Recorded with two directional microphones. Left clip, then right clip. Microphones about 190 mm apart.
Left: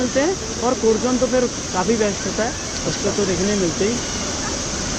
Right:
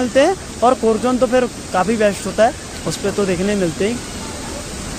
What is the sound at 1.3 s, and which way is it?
Speech, 65° right (ahead or behind).